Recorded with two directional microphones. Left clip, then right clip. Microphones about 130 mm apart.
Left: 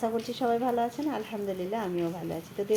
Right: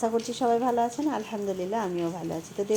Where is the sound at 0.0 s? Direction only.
30° right (ahead or behind).